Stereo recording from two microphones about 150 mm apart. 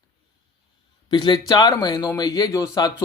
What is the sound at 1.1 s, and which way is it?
Speech, 30° left (ahead or behind).